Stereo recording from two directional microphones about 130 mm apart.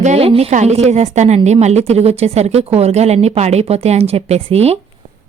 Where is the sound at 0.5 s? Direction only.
60° right (ahead or behind).